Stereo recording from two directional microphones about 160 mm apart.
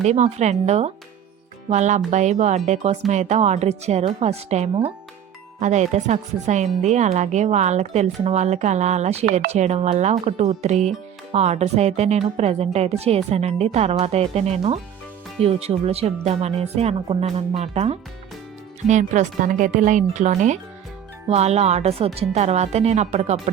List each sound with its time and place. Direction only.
0.0 s speech: 45° right (ahead or behind)